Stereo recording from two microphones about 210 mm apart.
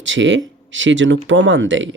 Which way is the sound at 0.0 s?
65° right (ahead or behind).